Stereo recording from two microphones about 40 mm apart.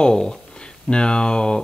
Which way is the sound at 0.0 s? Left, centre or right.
Centre.